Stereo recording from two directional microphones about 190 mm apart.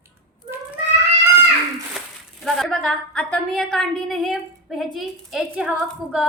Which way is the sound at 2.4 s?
Centre (ahead or behind).